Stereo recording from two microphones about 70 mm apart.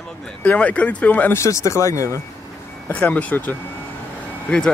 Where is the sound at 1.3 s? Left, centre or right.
Left.